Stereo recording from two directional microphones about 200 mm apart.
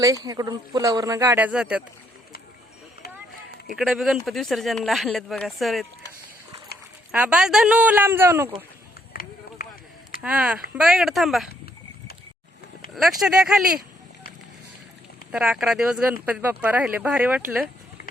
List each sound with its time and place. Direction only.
0.0 s speech: 15° right (ahead or behind)
3.8 s speech: centre (ahead or behind)
7.1 s speech: 5° right (ahead or behind)
9.6 s a sound: 50° left (ahead or behind)
10.2 s speech: 5° right (ahead or behind)
12.9 s speech: centre (ahead or behind)
15.3 s speech: centre (ahead or behind)